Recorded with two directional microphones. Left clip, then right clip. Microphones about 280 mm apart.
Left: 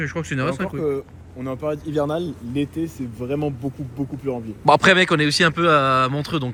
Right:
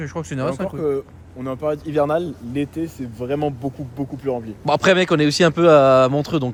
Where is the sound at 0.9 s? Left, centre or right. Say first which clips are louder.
Right 3 dB; right.